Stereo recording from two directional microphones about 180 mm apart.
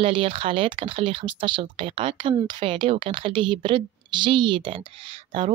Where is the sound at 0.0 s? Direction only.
30° right (ahead or behind).